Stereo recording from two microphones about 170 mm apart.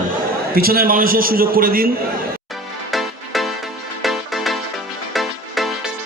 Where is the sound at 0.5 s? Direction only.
60° right (ahead or behind).